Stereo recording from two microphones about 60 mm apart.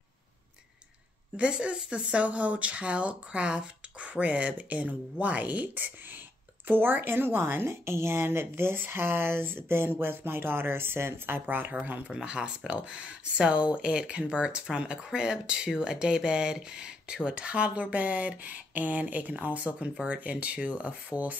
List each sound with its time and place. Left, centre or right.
1.3 s speech: centre
2.1 s speech: right
6.7 s speech: right
12.1 s speech: centre